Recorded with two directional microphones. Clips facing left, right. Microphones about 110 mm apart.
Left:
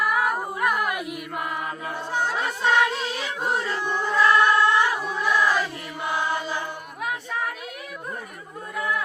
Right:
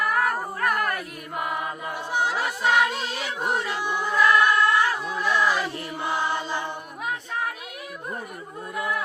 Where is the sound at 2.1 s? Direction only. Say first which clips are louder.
Right 1 dB; 10° right (ahead or behind).